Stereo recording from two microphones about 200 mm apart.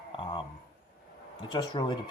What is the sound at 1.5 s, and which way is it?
Speech, 20° left (ahead or behind).